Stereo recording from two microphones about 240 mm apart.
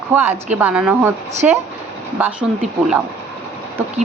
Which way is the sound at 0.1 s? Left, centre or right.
Centre.